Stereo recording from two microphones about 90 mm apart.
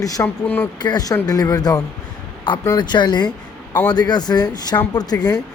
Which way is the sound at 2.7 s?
55° left (ahead or behind).